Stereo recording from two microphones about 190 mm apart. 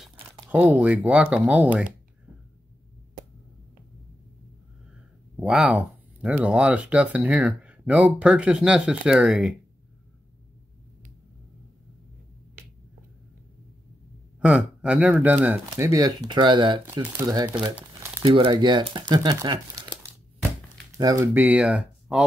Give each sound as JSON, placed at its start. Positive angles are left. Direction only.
{"t": 0.5, "sound": "speech", "side_deg": -10}
{"t": 5.4, "sound": "speech", "side_deg": -5}
{"t": 14.4, "sound": "speech", "side_deg": -5}
{"t": 18.2, "sound": "speech", "side_deg": -25}